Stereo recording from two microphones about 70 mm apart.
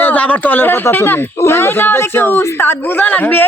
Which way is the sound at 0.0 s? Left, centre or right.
Left.